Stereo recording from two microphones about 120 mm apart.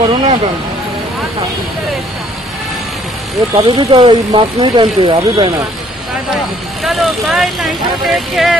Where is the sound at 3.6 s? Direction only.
50° right (ahead or behind).